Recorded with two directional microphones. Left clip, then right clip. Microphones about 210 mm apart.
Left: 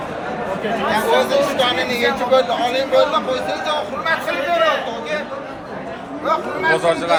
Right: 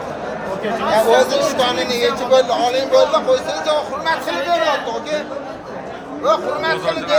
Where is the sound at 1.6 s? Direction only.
55° right (ahead or behind).